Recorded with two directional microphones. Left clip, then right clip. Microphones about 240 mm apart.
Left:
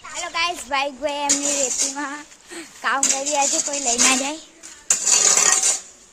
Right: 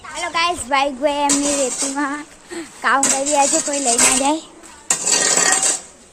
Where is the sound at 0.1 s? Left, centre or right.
Centre.